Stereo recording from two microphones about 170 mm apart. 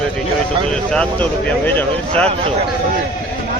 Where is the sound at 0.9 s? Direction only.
5° left (ahead or behind).